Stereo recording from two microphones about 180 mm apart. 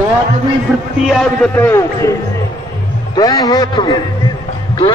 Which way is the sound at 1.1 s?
5° left (ahead or behind).